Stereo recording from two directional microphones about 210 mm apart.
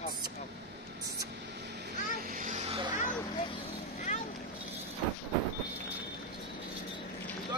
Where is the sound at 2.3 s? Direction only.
35° right (ahead or behind).